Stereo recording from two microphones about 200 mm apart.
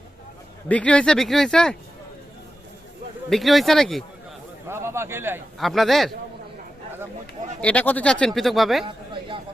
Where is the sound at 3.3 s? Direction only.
Centre (ahead or behind).